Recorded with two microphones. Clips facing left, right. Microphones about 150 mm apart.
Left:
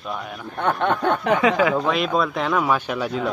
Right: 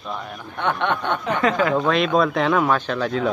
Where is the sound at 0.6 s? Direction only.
40° left (ahead or behind).